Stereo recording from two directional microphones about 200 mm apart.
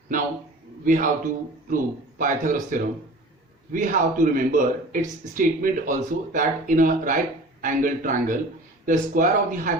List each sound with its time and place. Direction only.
0.9 s speech: 40° right (ahead or behind)